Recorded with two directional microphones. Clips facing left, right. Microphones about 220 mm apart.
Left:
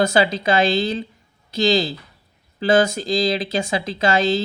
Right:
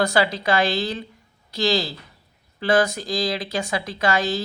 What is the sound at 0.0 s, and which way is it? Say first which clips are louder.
Speech: left 3 dB; 25° left (ahead or behind).